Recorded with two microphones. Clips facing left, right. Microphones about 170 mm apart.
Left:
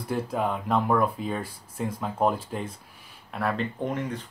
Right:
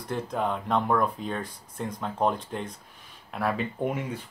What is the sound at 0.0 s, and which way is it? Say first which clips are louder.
Speech: left 2 dB; 5° left (ahead or behind).